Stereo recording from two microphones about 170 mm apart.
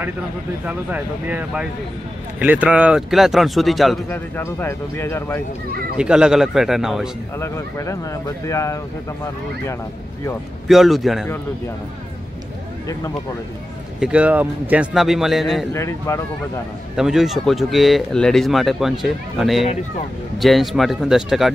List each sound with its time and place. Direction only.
0.7 s speech: 10° right (ahead or behind)
4.1 s speech: 15° left (ahead or behind)
5.9 s speech: 5° right (ahead or behind)
7.3 s speech: 15° left (ahead or behind)
10.7 s speech: centre (ahead or behind)
13.9 s speech: 5° right (ahead or behind)
15.7 s speech: 15° left (ahead or behind)
16.9 s speech: 5° right (ahead or behind)